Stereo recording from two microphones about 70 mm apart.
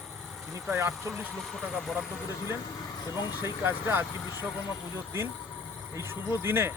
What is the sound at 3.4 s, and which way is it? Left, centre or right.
Speech, right.